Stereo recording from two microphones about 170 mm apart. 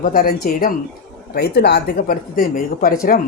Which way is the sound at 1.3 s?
70° left (ahead or behind).